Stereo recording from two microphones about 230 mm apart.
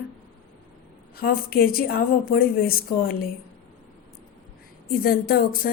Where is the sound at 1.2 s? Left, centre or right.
Left.